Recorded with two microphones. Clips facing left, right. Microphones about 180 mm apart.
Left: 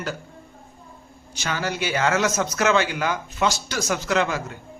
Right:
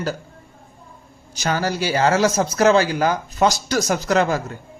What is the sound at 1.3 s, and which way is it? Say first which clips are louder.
Speech: right 5 dB; 40° right (ahead or behind).